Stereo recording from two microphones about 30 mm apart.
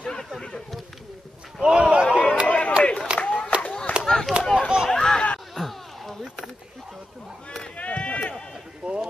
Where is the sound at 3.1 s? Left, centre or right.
Left.